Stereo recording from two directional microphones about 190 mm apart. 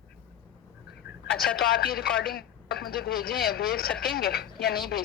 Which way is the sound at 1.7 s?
55° left (ahead or behind).